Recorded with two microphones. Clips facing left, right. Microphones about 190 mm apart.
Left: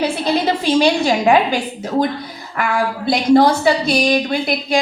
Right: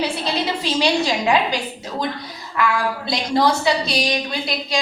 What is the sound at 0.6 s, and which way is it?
Speech, 50° left (ahead or behind).